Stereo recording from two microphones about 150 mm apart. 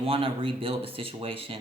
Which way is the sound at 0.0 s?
35° right (ahead or behind).